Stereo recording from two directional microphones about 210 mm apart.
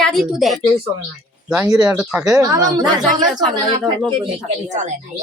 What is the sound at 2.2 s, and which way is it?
Speech, 15° right (ahead or behind).